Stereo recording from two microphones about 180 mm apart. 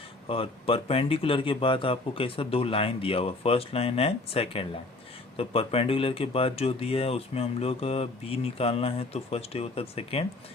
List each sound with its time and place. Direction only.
0.3 s speech: 30° left (ahead or behind)